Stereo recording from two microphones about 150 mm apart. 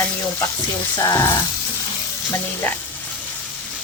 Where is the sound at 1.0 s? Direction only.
20° left (ahead or behind).